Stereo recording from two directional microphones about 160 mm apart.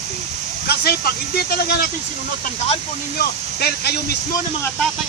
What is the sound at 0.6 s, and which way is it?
Speech, 75° left (ahead or behind).